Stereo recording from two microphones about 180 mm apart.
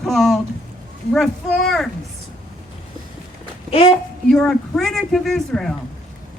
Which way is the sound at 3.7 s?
30° left (ahead or behind).